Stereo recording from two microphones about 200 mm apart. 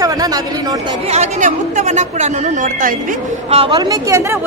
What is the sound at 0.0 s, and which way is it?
Speech, 20° right (ahead or behind).